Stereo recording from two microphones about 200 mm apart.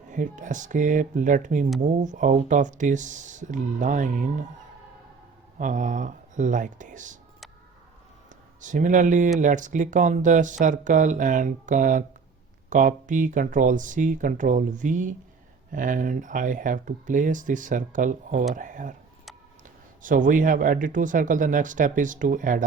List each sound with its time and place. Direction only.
0.1 s speech: 40° right (ahead or behind)
5.5 s speech: 40° right (ahead or behind)
8.6 s speech: 40° right (ahead or behind)
20.0 s speech: 40° right (ahead or behind)